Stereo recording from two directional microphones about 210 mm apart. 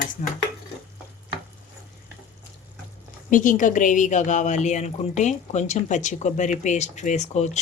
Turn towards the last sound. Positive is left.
turn(degrees=35)  # may be behind; listen again after turning